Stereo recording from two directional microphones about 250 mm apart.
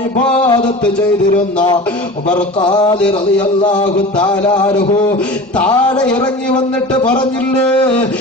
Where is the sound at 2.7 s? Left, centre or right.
Centre.